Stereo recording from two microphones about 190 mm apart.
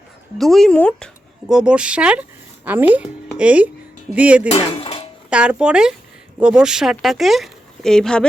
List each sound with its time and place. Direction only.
0.3 s speech: centre (ahead or behind)
4.5 s dishes: 30° left (ahead or behind)
5.3 s speech: 5° right (ahead or behind)